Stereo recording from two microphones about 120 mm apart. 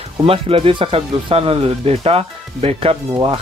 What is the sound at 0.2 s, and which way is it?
Speech, 50° right (ahead or behind).